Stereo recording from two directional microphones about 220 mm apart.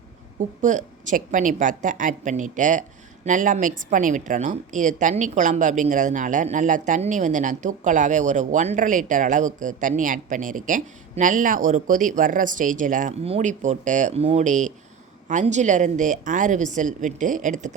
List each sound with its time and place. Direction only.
0.3 s a woman's voice: 35° right (ahead or behind)